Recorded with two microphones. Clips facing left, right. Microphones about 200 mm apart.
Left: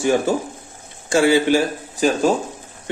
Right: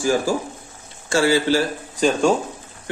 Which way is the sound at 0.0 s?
25° left (ahead or behind).